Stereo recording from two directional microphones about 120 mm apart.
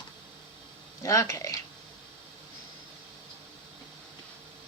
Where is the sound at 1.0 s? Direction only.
25° left (ahead or behind).